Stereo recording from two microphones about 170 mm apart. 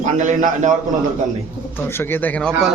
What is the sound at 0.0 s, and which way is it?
Speech, 45° right (ahead or behind).